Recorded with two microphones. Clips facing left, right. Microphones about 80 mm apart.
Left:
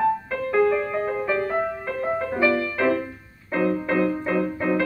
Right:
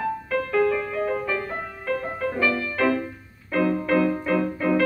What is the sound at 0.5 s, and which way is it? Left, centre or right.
Music, left.